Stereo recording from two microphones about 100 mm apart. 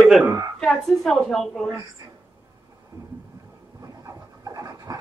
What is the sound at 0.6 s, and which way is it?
A woman's voice, 5° left (ahead or behind).